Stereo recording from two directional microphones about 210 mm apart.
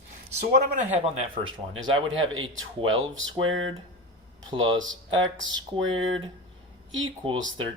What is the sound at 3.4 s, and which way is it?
Speech, 70° right (ahead or behind).